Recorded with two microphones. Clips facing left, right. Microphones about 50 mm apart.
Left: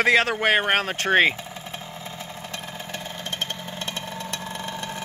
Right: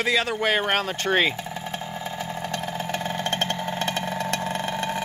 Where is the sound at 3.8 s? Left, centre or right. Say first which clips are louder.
Right 6 dB; right.